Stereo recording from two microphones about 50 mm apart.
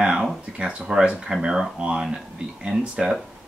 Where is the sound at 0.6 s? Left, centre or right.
Centre.